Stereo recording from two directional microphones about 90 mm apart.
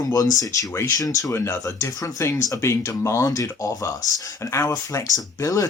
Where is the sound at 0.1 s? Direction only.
40° left (ahead or behind).